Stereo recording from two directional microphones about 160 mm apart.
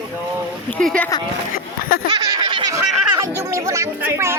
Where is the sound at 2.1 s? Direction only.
30° right (ahead or behind).